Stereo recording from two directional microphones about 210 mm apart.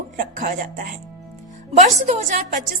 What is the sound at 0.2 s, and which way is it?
A woman's voice, 40° right (ahead or behind).